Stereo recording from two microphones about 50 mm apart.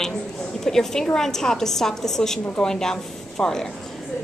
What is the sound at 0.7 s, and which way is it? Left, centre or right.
A woman's voice, centre.